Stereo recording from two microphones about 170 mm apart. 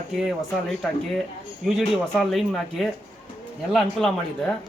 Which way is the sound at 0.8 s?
5° left (ahead or behind).